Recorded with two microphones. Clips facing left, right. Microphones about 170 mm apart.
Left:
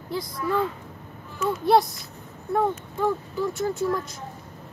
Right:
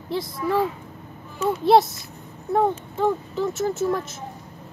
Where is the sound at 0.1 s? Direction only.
25° right (ahead or behind).